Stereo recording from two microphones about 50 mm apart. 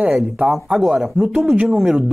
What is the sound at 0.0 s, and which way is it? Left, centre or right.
Speech, right.